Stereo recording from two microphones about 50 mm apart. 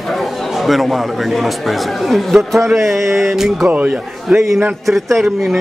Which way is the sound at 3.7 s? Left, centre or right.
Right.